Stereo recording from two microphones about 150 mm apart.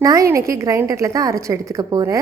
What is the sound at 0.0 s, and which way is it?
A woman's voice, 20° right (ahead or behind).